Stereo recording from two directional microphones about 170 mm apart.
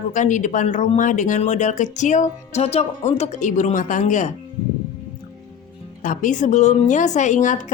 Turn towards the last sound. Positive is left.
turn(degrees=45)  # may be behind; listen again after turning